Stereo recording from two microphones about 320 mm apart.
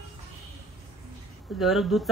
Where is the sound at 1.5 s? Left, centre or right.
Centre.